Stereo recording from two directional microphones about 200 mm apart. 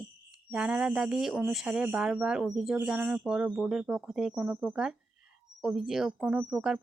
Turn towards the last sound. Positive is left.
turn(degrees=-5)  # may be behind; listen again after turning